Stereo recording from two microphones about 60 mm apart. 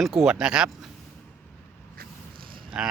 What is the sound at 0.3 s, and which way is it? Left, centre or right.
Speech, centre.